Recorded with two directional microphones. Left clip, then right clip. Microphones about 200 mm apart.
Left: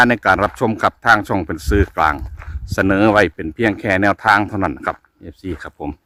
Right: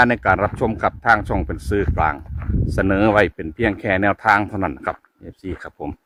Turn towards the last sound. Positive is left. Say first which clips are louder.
# left 3 dB
turn(degrees=15)  # may be behind; listen again after turning